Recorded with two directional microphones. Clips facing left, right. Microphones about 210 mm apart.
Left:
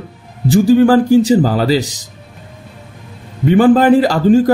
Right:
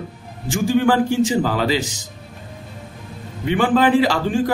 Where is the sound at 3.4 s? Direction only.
40° left (ahead or behind).